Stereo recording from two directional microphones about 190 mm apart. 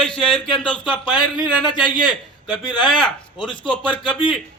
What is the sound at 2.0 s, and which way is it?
Speech, 25° left (ahead or behind).